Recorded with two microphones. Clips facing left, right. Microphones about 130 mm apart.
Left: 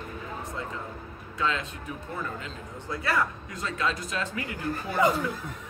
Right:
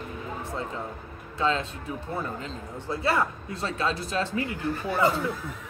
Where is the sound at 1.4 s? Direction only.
30° right (ahead or behind).